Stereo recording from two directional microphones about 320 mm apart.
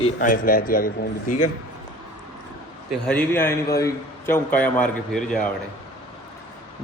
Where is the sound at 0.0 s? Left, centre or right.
Left.